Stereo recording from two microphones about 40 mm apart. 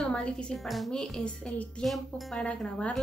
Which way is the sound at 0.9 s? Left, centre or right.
Centre.